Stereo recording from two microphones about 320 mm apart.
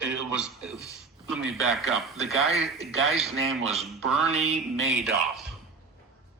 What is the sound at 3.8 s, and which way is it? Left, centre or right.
Speech, centre.